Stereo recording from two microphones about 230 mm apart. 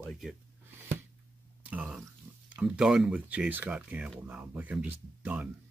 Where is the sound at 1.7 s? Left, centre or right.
Centre.